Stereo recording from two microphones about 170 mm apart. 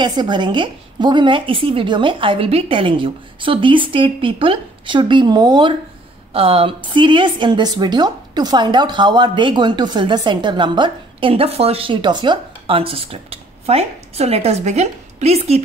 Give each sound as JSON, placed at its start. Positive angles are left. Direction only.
{"t": 0.0, "sound": "a woman's voice", "side_deg": -25}